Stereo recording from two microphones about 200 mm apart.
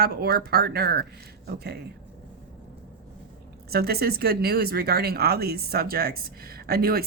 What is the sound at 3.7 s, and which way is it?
Speech, 50° right (ahead or behind).